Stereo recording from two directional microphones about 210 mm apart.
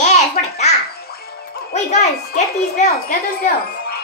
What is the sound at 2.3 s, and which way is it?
Speech, 40° left (ahead or behind).